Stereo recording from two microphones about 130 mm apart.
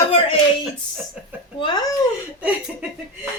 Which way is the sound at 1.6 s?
35° left (ahead or behind).